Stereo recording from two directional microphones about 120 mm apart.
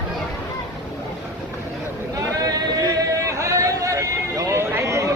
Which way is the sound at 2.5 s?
30° right (ahead or behind).